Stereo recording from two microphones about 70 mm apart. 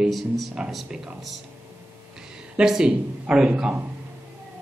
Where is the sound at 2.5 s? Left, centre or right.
Centre.